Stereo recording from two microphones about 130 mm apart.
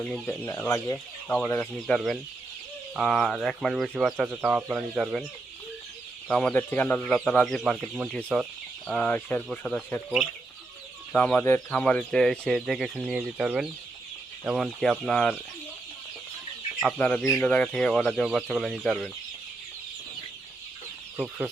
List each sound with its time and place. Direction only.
0.3 s speech: 15° left (ahead or behind)
1.5 s speech: centre (ahead or behind)
4.3 s speech: 10° right (ahead or behind)
6.2 s speech: 5° left (ahead or behind)
11.1 s speech: 10° left (ahead or behind)
16.8 s speech: 5° left (ahead or behind)
21.2 s speech: 15° right (ahead or behind)